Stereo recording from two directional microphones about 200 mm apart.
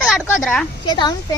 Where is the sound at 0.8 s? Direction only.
20° left (ahead or behind).